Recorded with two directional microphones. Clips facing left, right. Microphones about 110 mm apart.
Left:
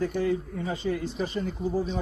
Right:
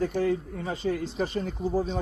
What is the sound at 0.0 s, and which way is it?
Speech, 45° right (ahead or behind).